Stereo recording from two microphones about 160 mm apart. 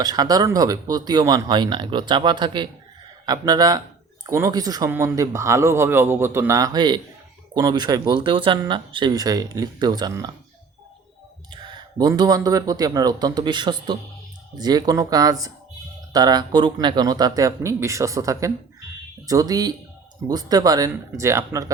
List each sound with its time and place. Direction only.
0.0 s a man's voice: 25° right (ahead or behind)
11.5 s a man's voice: 30° right (ahead or behind)